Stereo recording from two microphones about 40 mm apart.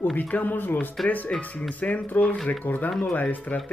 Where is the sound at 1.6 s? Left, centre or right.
Left.